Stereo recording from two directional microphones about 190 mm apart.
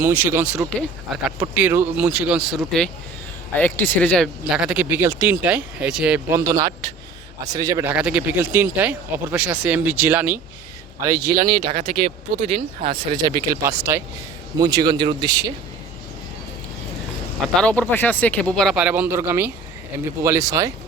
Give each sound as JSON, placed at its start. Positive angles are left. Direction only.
{"t": 0.0, "sound": "speech", "side_deg": -10}
{"t": 11.3, "sound": "speech", "side_deg": -50}
{"t": 13.5, "sound": "speech", "side_deg": -15}
{"t": 17.6, "sound": "speech", "side_deg": 5}